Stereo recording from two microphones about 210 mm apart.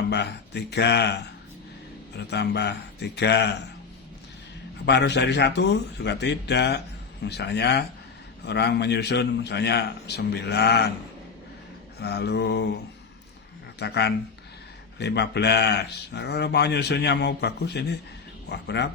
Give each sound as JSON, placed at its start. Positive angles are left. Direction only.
{"t": 0.1, "sound": "speech", "side_deg": 50}
{"t": 4.9, "sound": "speech", "side_deg": 55}
{"t": 11.9, "sound": "speech", "side_deg": 50}
{"t": 13.7, "sound": "speech", "side_deg": 50}